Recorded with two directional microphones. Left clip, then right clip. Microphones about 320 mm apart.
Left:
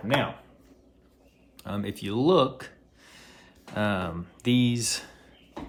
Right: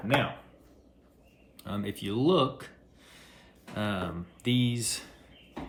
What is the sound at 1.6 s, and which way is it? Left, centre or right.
Speech, centre.